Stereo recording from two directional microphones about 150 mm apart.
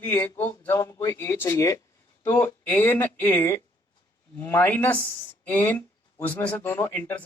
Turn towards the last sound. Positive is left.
turn(degrees=10)  # may be behind; listen again after turning